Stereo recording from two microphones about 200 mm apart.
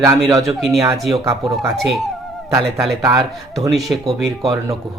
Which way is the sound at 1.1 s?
15° right (ahead or behind).